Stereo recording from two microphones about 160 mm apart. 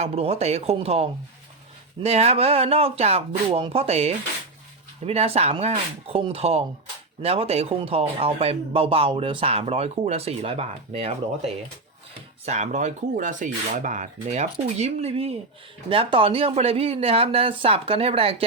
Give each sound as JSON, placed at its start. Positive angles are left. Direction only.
{"t": 0.0, "sound": "speech", "side_deg": -40}